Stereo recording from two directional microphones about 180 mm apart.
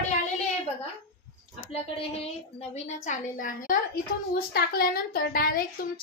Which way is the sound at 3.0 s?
50° left (ahead or behind).